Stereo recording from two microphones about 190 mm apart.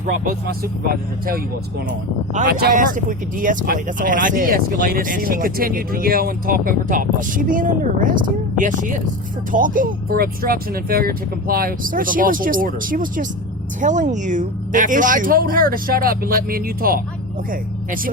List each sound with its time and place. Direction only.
0.1 s speech: 50° right (ahead or behind)
2.5 s speech: 50° right (ahead or behind)